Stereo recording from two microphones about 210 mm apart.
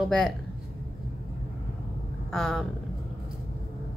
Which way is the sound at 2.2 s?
Centre (ahead or behind).